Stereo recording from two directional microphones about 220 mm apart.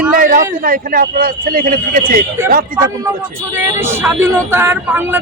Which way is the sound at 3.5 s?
10° right (ahead or behind).